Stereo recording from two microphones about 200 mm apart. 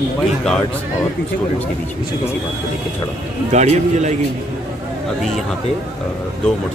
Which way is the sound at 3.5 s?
35° right (ahead or behind).